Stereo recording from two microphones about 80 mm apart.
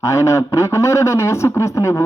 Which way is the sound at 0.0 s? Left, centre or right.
Left.